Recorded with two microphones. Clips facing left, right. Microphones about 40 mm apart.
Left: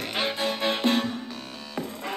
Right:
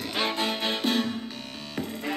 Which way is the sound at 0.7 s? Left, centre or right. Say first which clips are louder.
Left 4 dB; left.